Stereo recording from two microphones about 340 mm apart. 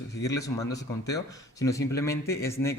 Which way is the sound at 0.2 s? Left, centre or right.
Centre.